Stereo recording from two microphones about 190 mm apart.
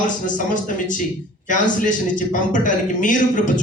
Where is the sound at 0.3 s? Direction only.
45° left (ahead or behind).